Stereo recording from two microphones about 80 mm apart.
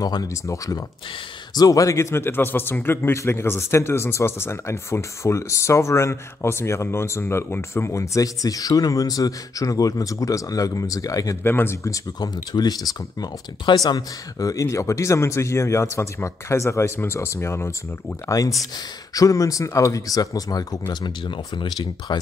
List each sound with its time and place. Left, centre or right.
0.0 s a man's voice: left
11.4 s a man's voice: left
12.2 s a man's voice: left
19.1 s speech: left
20.9 s speech: left
22.1 s speech: left